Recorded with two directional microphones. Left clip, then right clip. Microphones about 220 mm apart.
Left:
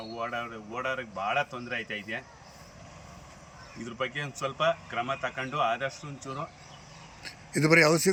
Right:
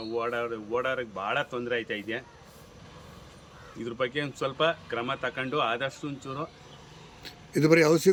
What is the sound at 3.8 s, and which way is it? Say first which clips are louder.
Speech: right 3 dB; 15° right (ahead or behind).